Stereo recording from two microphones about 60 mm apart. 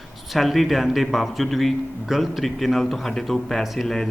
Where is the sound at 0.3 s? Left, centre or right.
Centre.